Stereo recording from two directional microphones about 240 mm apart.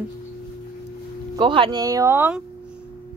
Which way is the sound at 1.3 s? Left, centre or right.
Right.